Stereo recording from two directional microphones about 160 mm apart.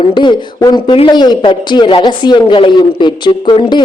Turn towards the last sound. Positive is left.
turn(degrees=30)  # may be behind; listen again after turning